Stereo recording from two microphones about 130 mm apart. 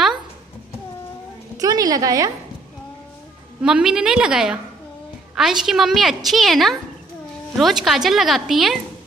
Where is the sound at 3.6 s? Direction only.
5° right (ahead or behind).